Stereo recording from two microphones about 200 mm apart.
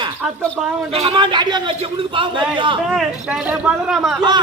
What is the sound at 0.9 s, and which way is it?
Speech, 25° right (ahead or behind).